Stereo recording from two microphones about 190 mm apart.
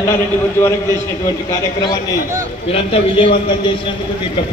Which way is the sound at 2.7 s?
30° left (ahead or behind).